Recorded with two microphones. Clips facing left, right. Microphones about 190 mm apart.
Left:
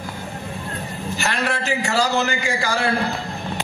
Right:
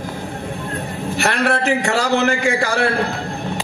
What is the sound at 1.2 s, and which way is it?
A man's voice, 65° right (ahead or behind).